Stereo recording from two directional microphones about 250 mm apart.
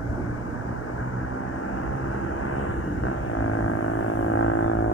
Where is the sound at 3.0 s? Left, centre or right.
Left.